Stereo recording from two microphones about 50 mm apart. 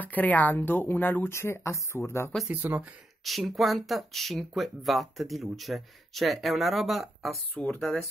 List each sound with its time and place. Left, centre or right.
0.0 s speech: left
0.6 s speech: left
1.3 s speech: left
2.5 s speech: right
3.3 s speech: centre